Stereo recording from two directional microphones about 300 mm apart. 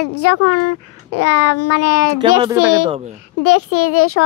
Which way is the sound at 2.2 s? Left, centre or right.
Centre.